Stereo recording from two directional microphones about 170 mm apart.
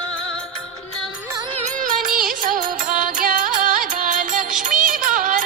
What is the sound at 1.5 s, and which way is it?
Music, 40° right (ahead or behind).